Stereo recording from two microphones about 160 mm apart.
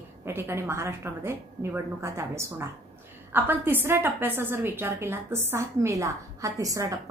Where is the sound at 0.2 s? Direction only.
15° right (ahead or behind).